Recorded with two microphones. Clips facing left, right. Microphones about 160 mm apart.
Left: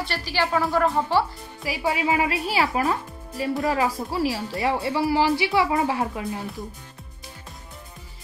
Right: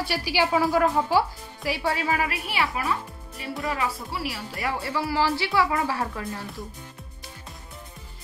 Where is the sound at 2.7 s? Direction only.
35° left (ahead or behind); by 6.4 s 20° left (ahead or behind).